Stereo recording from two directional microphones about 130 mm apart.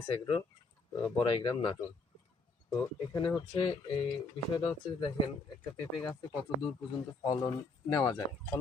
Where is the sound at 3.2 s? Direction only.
40° left (ahead or behind).